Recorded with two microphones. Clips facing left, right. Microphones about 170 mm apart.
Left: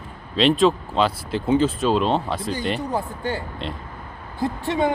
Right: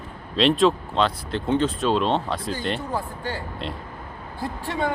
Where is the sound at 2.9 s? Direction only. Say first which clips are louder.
Left 3 dB; 20° left (ahead or behind).